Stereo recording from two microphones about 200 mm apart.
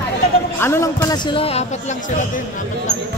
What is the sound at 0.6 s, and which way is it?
Speech, 10° left (ahead or behind).